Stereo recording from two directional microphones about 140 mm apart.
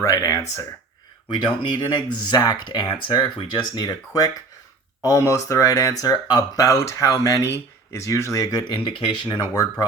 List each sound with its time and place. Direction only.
0.0 s speech: 25° left (ahead or behind)
1.3 s speech: 35° left (ahead or behind)